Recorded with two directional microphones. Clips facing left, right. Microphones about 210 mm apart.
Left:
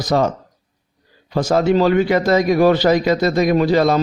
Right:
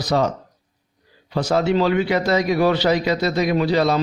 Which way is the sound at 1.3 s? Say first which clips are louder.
Left 3 dB; 45° left (ahead or behind).